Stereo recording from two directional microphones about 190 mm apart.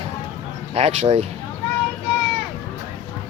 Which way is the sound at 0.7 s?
35° right (ahead or behind).